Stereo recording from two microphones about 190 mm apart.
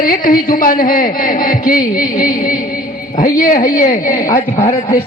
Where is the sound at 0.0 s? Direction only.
45° left (ahead or behind).